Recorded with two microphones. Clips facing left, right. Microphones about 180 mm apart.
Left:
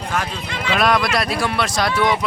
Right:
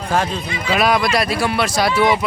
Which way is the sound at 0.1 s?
30° right (ahead or behind).